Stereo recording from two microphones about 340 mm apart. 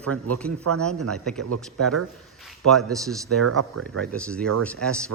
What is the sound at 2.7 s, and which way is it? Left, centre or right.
Speech, centre.